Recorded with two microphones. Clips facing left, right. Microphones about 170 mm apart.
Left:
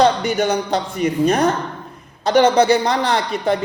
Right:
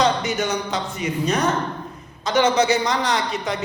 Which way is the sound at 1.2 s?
55° left (ahead or behind).